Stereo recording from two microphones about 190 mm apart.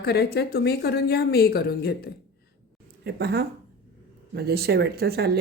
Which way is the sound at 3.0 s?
60° right (ahead or behind).